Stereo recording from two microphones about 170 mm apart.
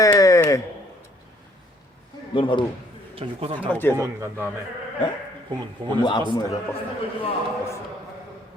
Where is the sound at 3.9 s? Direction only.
15° right (ahead or behind).